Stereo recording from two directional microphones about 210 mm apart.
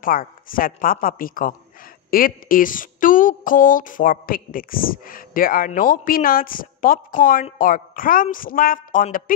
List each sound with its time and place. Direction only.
0.0 s speech: 40° left (ahead or behind)